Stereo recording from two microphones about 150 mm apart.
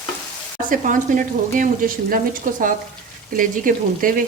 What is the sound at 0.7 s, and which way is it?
Speech, 60° right (ahead or behind).